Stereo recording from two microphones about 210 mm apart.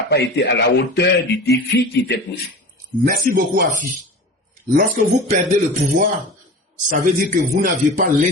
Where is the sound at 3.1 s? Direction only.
45° right (ahead or behind).